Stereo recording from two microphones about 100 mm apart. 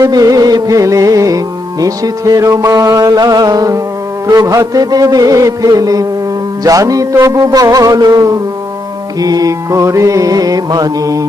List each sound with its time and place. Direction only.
0.0 s mantra: 35° right (ahead or behind)